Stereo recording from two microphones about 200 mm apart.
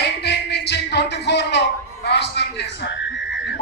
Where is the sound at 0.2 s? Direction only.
55° left (ahead or behind).